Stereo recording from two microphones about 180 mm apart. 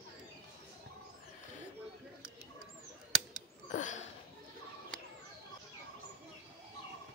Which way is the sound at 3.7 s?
45° left (ahead or behind).